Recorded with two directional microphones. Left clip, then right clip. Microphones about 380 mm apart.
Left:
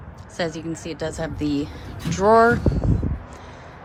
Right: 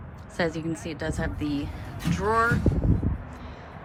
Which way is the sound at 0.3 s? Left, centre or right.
Centre.